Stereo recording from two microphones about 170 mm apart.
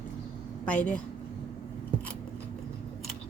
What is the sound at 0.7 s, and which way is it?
Speech, 5° left (ahead or behind).